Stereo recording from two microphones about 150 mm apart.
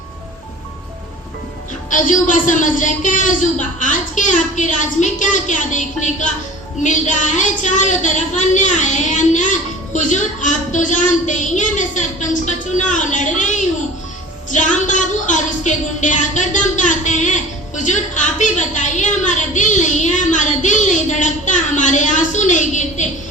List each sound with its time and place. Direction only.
1.9 s speech: 60° left (ahead or behind)
14.5 s music: 55° left (ahead or behind)